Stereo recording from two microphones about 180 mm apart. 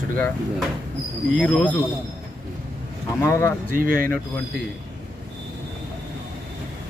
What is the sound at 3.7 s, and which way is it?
Speech, 50° right (ahead or behind).